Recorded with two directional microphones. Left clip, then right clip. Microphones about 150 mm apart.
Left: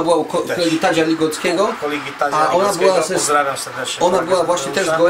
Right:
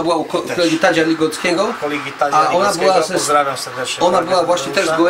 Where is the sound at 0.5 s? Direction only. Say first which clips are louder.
Right 5 dB; centre (ahead or behind).